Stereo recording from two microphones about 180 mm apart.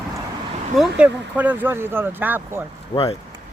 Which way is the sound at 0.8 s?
5° right (ahead or behind).